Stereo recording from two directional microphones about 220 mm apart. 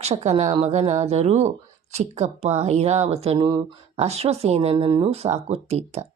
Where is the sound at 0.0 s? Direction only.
30° right (ahead or behind).